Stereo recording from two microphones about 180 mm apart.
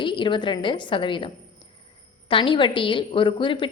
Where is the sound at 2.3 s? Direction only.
30° left (ahead or behind).